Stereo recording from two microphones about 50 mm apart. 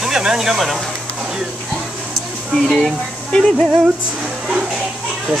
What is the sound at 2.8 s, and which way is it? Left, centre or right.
Speech, centre.